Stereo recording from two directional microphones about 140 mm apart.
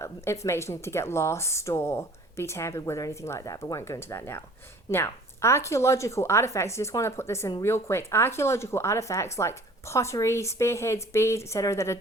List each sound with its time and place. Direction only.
0.0 s speech: 20° left (ahead or behind)